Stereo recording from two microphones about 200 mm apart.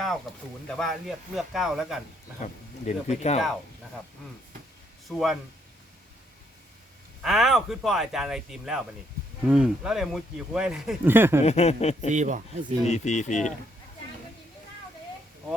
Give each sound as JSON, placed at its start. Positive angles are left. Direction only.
{"t": 0.7, "sound": "speech", "side_deg": 0}
{"t": 2.4, "sound": "speech", "side_deg": 35}
{"t": 5.0, "sound": "speech", "side_deg": 0}
{"t": 7.2, "sound": "speech", "side_deg": 0}
{"t": 11.4, "sound": "speech", "side_deg": 30}
{"t": 12.0, "sound": "speech", "side_deg": -35}
{"t": 12.8, "sound": "speech", "side_deg": 35}